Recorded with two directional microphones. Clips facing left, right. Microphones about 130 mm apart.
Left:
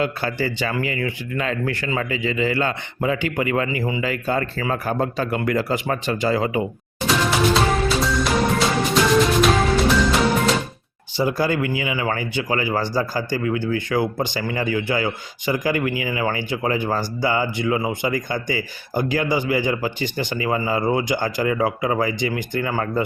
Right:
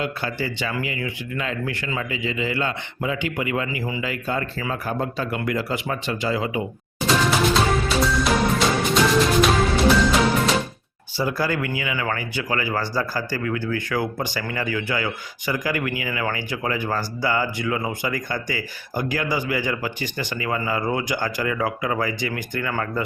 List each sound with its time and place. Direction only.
0.0 s a man's voice: 40° left (ahead or behind)
7.1 s music: centre (ahead or behind)
11.2 s speech: 20° left (ahead or behind)